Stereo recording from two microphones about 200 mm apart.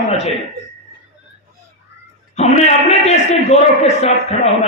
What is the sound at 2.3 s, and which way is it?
A man's voice, 35° left (ahead or behind).